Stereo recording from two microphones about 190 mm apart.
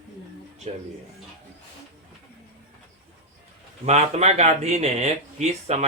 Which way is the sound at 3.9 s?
35° right (ahead or behind).